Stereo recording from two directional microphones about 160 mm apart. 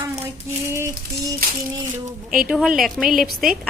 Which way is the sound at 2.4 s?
5° right (ahead or behind).